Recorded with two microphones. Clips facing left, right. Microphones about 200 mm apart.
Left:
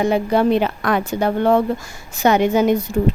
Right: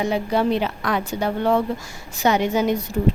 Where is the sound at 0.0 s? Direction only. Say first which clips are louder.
Left 4 dB; 50° left (ahead or behind).